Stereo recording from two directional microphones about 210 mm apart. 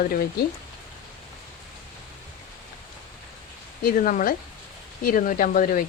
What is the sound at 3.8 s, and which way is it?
Speech, 40° left (ahead or behind).